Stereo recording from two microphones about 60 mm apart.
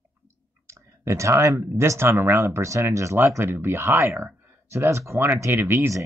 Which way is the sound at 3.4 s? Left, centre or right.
Right.